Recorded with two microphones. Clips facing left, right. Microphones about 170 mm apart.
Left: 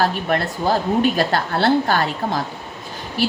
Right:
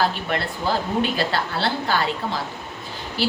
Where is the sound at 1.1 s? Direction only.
50° left (ahead or behind).